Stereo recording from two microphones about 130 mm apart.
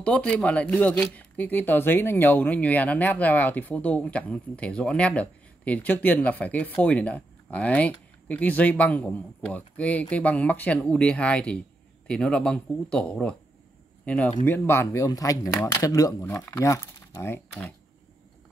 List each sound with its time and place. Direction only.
0.0 s speech: 10° left (ahead or behind)